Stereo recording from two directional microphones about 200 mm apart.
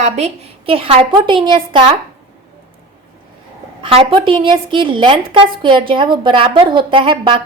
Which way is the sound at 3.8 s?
25° right (ahead or behind).